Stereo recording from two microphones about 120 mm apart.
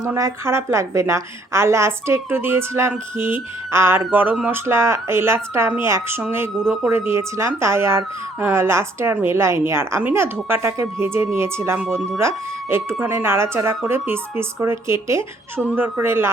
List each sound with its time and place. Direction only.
0.0 s a woman's voice: 25° right (ahead or behind)